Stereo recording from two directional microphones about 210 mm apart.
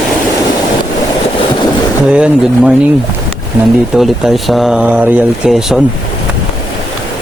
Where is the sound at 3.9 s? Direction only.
Centre (ahead or behind).